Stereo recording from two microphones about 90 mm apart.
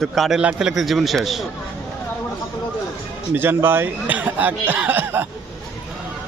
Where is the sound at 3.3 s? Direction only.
25° right (ahead or behind).